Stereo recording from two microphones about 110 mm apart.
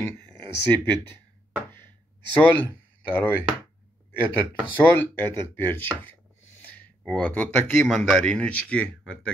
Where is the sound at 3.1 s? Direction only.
15° left (ahead or behind).